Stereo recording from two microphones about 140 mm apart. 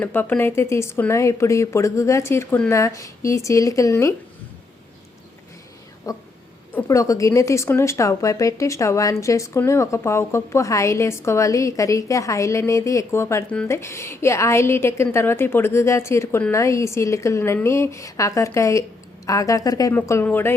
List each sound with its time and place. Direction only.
0.0 s a woman's voice: 15° left (ahead or behind)
6.1 s a woman's voice: 25° left (ahead or behind)